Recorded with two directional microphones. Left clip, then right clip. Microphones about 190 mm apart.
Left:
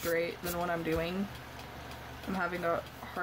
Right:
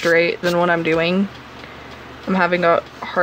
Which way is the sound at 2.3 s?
40° right (ahead or behind).